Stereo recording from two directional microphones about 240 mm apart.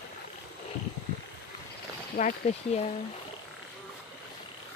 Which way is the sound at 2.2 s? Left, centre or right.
Left.